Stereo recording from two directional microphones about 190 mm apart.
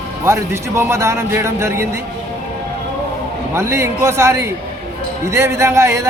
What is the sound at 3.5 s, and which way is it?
Speech, 15° right (ahead or behind).